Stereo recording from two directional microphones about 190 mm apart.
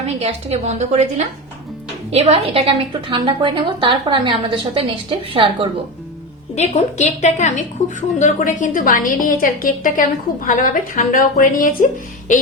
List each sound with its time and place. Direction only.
0.0 s a woman's voice: 35° right (ahead or behind)
6.6 s a woman's voice: 40° left (ahead or behind)